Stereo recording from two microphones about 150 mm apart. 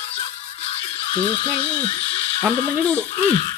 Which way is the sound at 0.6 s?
35° left (ahead or behind).